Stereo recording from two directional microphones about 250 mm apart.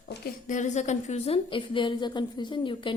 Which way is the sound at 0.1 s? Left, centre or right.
Left.